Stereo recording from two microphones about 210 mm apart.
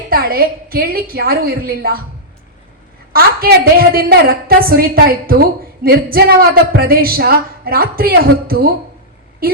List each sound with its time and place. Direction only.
0.1 s a woman's voice: 45° right (ahead or behind)
3.1 s a woman's voice: 45° right (ahead or behind)